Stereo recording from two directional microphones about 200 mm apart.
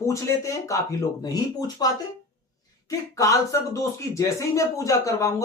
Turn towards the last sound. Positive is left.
turn(degrees=15)  # may be behind; listen again after turning